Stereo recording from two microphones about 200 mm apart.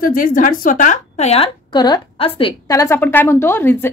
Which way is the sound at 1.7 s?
20° left (ahead or behind).